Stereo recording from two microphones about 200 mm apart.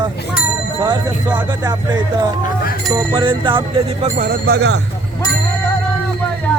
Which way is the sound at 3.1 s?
25° right (ahead or behind).